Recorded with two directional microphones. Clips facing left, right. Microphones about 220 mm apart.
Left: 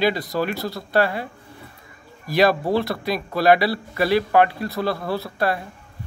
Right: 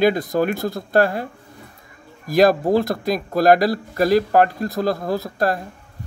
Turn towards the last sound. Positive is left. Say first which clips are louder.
# right 2 dB
turn(degrees=-45)  # may be behind; listen again after turning